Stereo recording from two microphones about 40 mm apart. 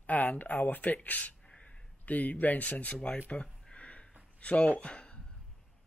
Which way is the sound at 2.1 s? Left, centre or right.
Left.